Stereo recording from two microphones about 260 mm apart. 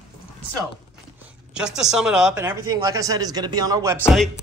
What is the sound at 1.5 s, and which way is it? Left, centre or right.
Speech, centre.